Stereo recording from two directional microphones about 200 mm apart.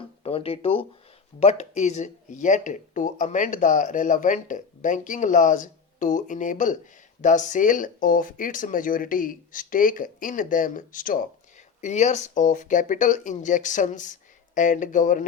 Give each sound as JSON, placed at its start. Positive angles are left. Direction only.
{"t": 0.2, "sound": "speech", "side_deg": 30}